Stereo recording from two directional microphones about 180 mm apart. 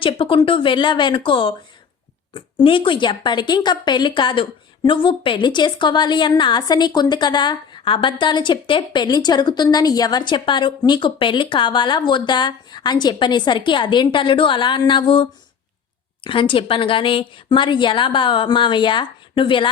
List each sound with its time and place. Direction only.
0.0 s speech: 30° left (ahead or behind)